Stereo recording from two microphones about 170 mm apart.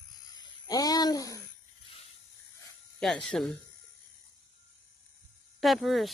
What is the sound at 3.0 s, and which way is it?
Speech, 5° left (ahead or behind).